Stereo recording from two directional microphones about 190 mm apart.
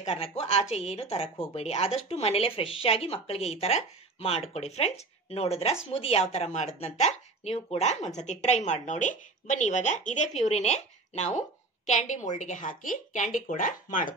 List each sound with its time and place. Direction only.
0.0 s speech: 35° left (ahead or behind)